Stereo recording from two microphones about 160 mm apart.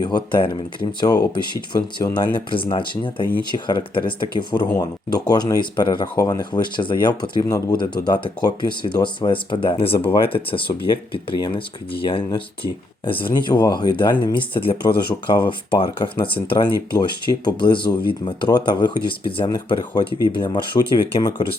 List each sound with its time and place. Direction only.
0.0 s speech: 30° left (ahead or behind)